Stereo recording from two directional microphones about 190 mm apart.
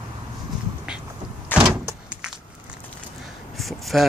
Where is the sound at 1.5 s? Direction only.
5° right (ahead or behind).